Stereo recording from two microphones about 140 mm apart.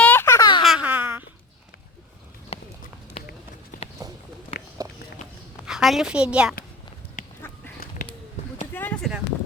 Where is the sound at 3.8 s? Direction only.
45° left (ahead or behind).